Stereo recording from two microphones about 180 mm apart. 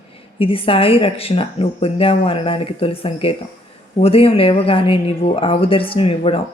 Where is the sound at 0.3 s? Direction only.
30° left (ahead or behind).